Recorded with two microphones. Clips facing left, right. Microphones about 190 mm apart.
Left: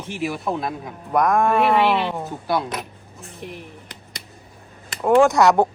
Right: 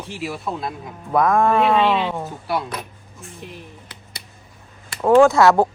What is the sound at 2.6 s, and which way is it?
Speech, 20° left (ahead or behind).